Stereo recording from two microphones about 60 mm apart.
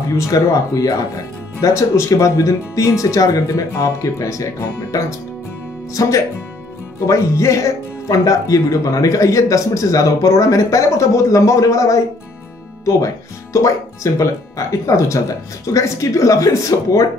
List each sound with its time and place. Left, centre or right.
0.3 s speech: left